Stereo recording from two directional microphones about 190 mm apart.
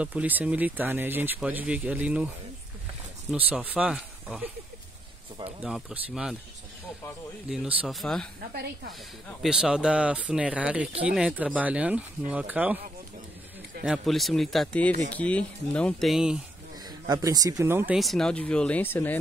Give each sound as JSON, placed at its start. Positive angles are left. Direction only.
{"t": 0.0, "sound": "speech", "side_deg": -10}
{"t": 5.6, "sound": "speech", "side_deg": -5}
{"t": 7.4, "sound": "speech", "side_deg": -5}
{"t": 9.4, "sound": "speech", "side_deg": -5}
{"t": 13.8, "sound": "speech", "side_deg": 0}
{"t": 17.0, "sound": "speech", "side_deg": -20}
{"t": 17.9, "sound": "speech", "side_deg": 0}